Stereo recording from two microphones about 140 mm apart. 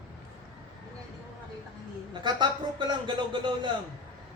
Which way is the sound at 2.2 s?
30° right (ahead or behind).